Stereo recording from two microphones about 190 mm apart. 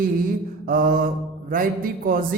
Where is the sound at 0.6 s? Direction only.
45° right (ahead or behind).